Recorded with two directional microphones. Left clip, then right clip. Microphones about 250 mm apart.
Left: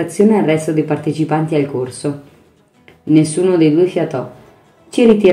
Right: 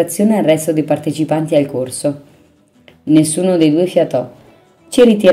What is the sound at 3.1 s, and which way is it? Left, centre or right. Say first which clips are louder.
Speech: even; right.